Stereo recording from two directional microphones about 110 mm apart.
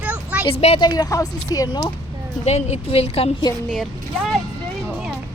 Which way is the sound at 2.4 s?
85° left.